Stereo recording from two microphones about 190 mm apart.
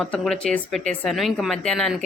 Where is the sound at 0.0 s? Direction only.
5° left (ahead or behind).